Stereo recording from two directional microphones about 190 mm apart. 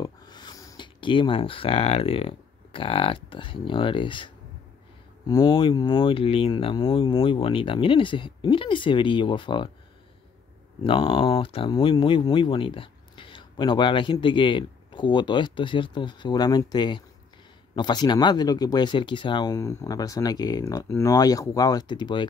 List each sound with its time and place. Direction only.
0.0 s speech: 20° left (ahead or behind)
10.8 s speech: 25° left (ahead or behind)